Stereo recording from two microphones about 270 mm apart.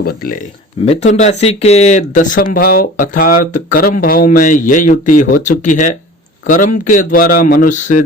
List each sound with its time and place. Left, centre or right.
0.0 s speech: left